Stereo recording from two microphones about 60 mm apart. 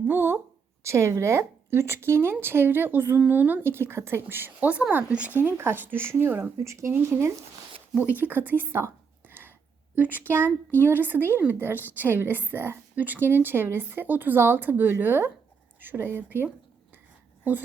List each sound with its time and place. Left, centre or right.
0.1 s speech: right
0.8 s speech: right
6.7 s speech: right
7.9 s speech: right
9.9 s speech: right